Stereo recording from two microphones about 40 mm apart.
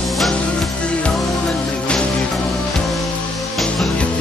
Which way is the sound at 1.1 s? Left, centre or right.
Centre.